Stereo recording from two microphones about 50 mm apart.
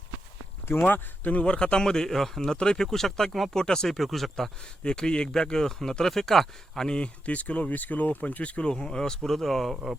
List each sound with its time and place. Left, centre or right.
0.6 s speech: left
1.4 s speech: centre
4.8 s speech: centre